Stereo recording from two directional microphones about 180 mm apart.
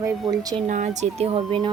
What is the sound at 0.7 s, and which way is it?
Speech, 40° right (ahead or behind).